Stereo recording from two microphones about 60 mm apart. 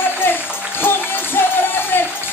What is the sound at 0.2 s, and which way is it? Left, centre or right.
Music, left.